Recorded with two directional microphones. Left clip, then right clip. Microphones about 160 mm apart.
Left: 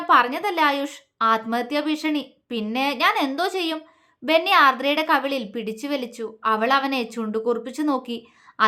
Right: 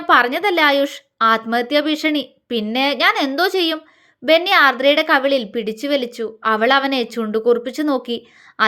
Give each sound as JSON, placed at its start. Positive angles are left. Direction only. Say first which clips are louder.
{"t": 0.0, "sound": "a woman's voice", "louder": "right 4 dB", "side_deg": -25}